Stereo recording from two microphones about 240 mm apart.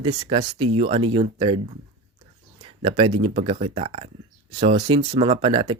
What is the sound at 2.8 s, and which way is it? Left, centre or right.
Speech, right.